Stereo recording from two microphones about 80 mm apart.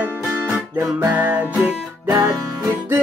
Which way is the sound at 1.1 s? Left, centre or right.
Right.